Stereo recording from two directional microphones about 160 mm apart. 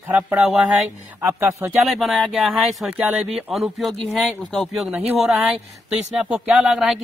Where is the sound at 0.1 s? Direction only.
5° right (ahead or behind).